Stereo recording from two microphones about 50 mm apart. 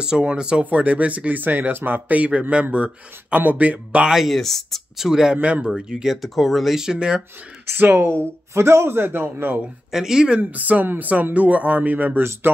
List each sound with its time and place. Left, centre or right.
0.0 s speech: centre
0.7 s speech: right
2.0 s speech: right
4.3 s speech: centre
4.9 s speech: centre
5.4 s speech: right
6.2 s speech: centre
7.6 s speech: right
8.0 s speech: right
8.9 s a man's voice: right
9.8 s speech: centre
10.4 s speech: right